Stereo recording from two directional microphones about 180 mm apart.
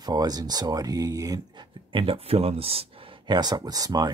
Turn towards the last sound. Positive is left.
turn(degrees=-20)  # may be behind; listen again after turning